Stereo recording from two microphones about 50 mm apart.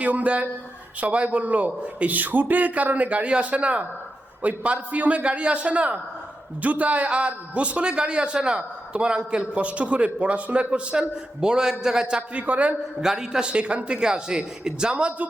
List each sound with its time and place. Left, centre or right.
0.0 s a man's voice: right
13.0 s a man's voice: centre